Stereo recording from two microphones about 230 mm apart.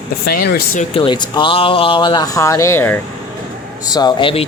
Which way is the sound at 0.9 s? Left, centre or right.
Left.